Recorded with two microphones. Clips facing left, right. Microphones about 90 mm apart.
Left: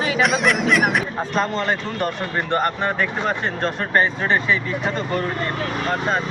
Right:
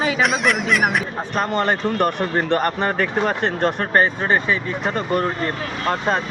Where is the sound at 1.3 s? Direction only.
55° right (ahead or behind).